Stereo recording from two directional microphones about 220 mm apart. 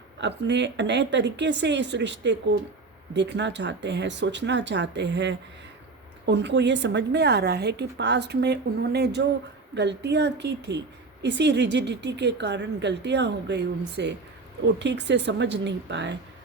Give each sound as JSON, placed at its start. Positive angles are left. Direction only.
{"t": 0.2, "sound": "a woman's voice", "side_deg": -50}